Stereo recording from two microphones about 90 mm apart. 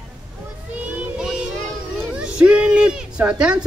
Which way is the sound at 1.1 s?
10° right (ahead or behind).